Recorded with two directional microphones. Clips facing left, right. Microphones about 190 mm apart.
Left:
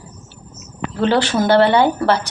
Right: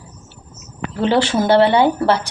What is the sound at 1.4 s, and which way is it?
Speech, 25° right (ahead or behind).